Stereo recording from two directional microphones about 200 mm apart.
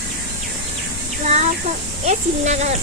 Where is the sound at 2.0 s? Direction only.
35° right (ahead or behind).